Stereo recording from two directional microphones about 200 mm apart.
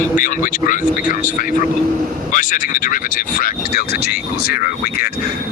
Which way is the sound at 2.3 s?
40° left (ahead or behind).